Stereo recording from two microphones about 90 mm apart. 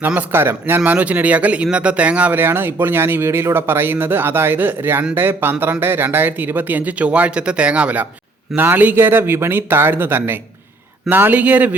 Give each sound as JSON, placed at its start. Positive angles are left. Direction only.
{"t": 0.0, "sound": "speech", "side_deg": -20}